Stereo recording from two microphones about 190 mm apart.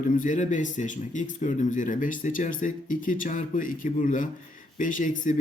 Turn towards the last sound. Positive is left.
turn(degrees=45)  # may be behind; listen again after turning